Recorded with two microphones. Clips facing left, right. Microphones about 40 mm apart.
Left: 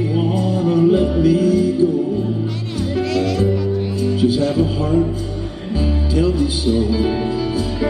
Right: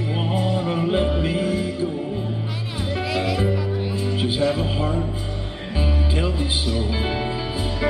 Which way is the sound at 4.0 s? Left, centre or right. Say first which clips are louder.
Left 6 dB; right.